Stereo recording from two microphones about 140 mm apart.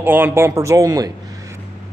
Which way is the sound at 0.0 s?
15° right (ahead or behind).